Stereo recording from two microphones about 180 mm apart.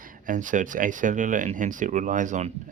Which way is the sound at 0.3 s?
45° right (ahead or behind).